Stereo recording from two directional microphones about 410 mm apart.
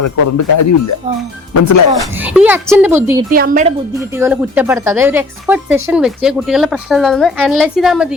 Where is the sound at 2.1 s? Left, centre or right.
Centre.